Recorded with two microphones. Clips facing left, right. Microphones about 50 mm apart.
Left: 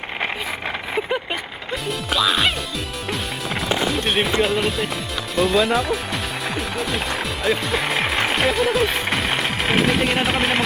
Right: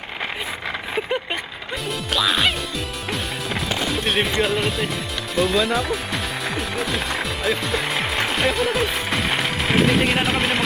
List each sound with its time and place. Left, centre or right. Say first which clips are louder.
2.1 s music: left 1 dB; centre
5.3 s speech: left 2 dB; centre